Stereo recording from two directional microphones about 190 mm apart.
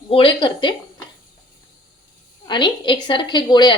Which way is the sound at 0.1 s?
25° left (ahead or behind).